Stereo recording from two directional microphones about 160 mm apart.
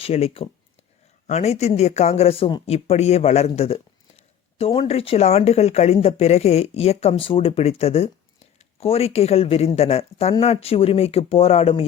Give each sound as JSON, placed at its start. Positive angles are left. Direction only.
{"t": 0.0, "sound": "speech", "side_deg": 40}